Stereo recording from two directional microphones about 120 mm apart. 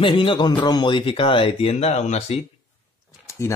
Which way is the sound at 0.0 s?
45° left (ahead or behind).